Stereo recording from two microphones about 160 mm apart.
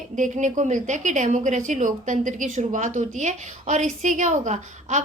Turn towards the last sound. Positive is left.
turn(degrees=-50)  # may be behind; listen again after turning